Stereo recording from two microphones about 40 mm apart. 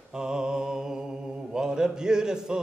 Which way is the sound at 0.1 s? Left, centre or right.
Centre.